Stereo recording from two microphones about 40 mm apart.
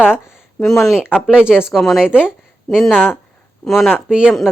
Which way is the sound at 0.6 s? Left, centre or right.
Centre.